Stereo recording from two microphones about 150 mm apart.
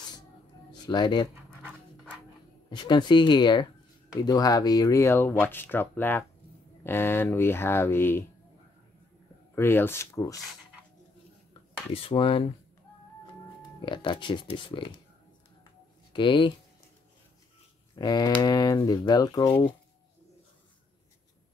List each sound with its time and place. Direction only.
0.8 s speech: 30° left (ahead or behind)
2.7 s speech: 30° left (ahead or behind)
9.6 s speech: 15° left (ahead or behind)
11.9 s speech: 35° left (ahead or behind)
13.7 s speech: 30° left (ahead or behind)
16.1 s speech: 35° left (ahead or behind)
17.9 s speech: 25° left (ahead or behind)